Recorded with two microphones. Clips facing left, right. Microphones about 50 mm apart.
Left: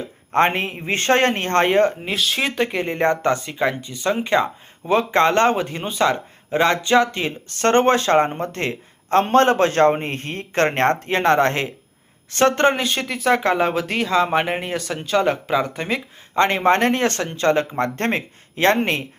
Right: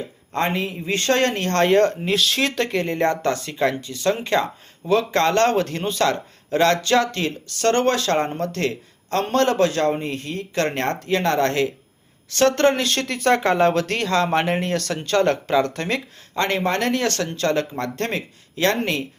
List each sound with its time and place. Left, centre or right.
0.3 s speech: left
7.5 s speech: left; by 16.0 s centre
16.3 s speech: left